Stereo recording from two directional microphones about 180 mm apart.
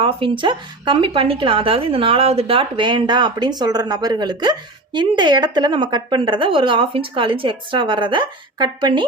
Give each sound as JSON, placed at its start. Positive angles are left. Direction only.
{"t": 0.0, "sound": "speech", "side_deg": -30}